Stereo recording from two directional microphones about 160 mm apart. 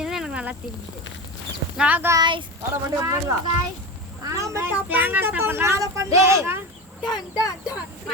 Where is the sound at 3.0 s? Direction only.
20° right (ahead or behind).